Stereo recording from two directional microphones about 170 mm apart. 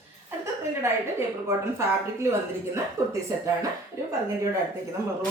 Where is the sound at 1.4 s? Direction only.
15° right (ahead or behind).